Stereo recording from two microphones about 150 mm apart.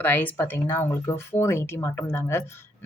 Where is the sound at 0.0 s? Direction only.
10° left (ahead or behind).